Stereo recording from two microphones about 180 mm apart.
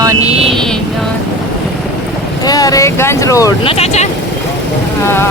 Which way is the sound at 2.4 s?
20° left (ahead or behind).